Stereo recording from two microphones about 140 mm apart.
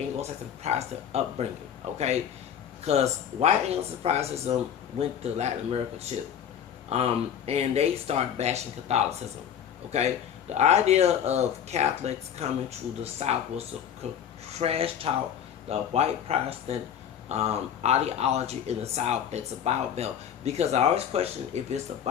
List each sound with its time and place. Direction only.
0.2 s speech: 50° right (ahead or behind)
2.8 s speech: 50° right (ahead or behind)